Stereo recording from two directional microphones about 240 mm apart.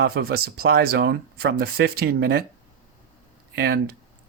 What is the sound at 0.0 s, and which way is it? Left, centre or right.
Speech, right.